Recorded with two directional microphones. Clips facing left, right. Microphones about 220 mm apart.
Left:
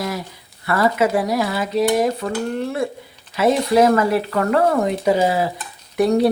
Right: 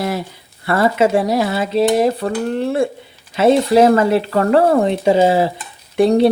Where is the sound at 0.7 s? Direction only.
25° right (ahead or behind).